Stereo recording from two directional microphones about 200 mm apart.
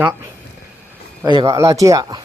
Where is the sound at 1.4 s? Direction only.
15° right (ahead or behind).